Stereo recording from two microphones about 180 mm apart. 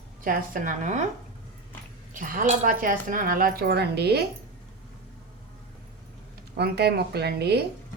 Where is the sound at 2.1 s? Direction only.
50° right (ahead or behind); by 4.2 s 65° right (ahead or behind).